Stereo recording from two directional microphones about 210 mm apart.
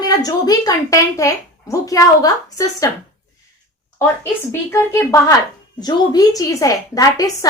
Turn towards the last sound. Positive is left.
turn(degrees=15)  # may be behind; listen again after turning